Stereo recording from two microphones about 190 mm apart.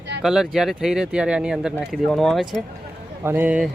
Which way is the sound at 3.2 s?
10° right (ahead or behind).